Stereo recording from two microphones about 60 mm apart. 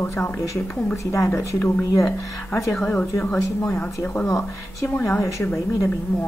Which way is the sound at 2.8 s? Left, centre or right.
Left.